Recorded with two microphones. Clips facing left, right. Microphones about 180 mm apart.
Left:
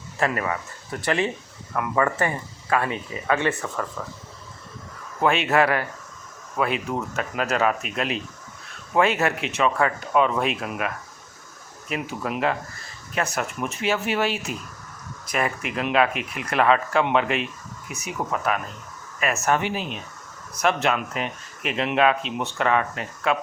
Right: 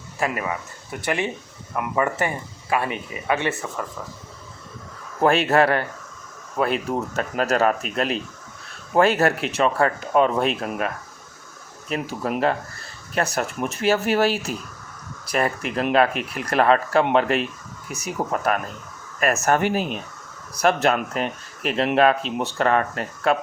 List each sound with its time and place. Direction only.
0.2 s speech: 10° right (ahead or behind)
5.2 s speech: 40° right (ahead or behind)